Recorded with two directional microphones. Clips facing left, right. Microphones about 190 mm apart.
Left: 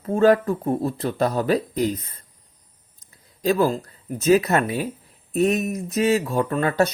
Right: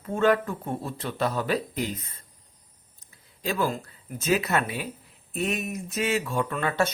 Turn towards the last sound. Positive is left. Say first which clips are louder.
# left 6 dB
turn(degrees=40)  # may be behind; listen again after turning